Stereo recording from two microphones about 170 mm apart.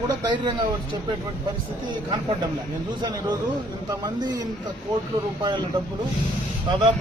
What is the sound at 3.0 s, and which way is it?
Speech, 25° right (ahead or behind).